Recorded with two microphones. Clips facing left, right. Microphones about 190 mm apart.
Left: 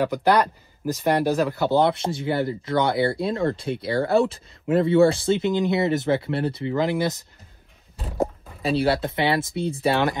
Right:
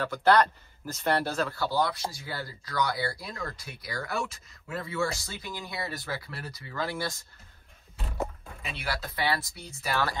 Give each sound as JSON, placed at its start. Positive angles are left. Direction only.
{"t": 0.0, "sound": "speech", "side_deg": 15}
{"t": 8.2, "sound": "speech", "side_deg": 30}